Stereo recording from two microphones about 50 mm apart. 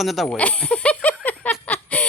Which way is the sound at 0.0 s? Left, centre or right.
Centre.